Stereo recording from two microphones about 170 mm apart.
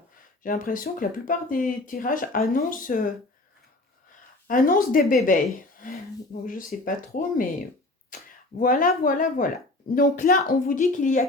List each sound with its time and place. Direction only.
0.4 s speech: 55° left (ahead or behind)
4.4 s speech: 55° left (ahead or behind)
5.7 s finger snapping: 55° left (ahead or behind)
6.4 s speech: 55° left (ahead or behind)